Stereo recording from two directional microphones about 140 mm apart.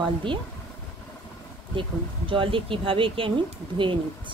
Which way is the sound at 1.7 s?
40° right (ahead or behind).